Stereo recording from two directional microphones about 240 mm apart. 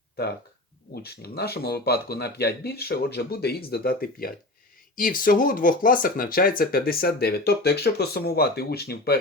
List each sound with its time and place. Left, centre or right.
1.0 s speech: left